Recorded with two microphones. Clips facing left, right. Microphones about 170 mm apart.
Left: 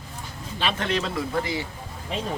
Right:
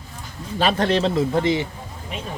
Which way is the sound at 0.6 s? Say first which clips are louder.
Right 7 dB; 35° right (ahead or behind).